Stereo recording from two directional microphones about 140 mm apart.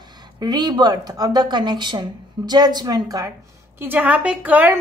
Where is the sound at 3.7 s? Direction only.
15° right (ahead or behind).